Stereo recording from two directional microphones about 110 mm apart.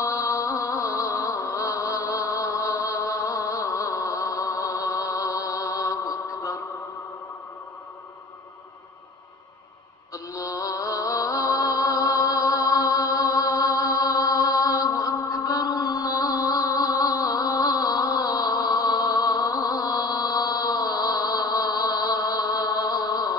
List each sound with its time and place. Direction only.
0.2 s music: 30° left (ahead or behind)
10.1 s music: 30° left (ahead or behind)